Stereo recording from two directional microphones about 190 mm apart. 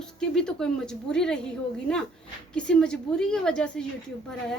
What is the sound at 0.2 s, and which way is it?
A woman's voice, 5° left (ahead or behind).